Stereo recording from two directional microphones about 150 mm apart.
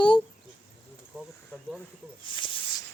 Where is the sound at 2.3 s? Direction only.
35° left (ahead or behind).